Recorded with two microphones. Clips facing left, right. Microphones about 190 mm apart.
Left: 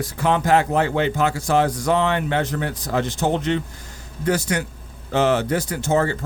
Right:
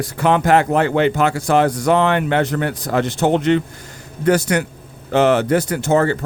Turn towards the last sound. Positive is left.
turn(degrees=-65)  # may be behind; listen again after turning